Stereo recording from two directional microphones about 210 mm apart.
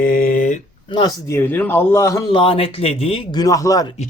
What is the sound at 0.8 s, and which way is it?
A man's voice, 20° left (ahead or behind).